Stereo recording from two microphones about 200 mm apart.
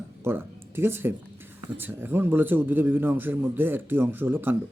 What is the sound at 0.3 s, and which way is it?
Speech, 10° right (ahead or behind).